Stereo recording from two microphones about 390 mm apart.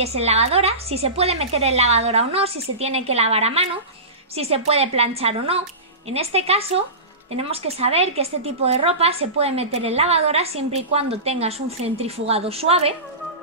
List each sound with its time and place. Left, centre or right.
0.0 s a woman's voice: centre